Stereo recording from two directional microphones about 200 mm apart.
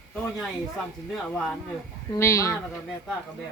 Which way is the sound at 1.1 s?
Centre (ahead or behind).